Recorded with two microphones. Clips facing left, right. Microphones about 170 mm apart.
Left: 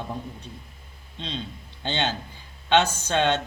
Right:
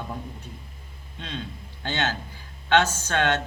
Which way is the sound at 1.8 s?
20° left (ahead or behind).